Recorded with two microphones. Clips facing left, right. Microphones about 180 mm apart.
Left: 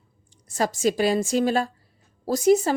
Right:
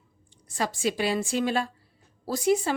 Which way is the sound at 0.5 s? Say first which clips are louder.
Left 5 dB; 45° left (ahead or behind).